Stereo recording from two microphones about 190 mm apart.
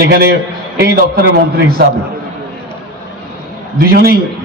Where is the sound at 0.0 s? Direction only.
55° right (ahead or behind).